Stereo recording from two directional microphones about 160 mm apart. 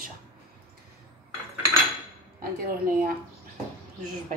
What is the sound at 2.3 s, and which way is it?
Dishes, 65° right (ahead or behind).